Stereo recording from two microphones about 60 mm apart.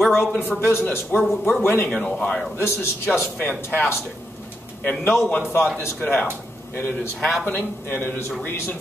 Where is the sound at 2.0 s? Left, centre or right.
Centre.